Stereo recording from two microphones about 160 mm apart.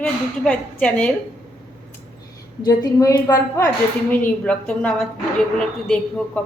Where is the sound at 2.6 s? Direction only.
25° left (ahead or behind).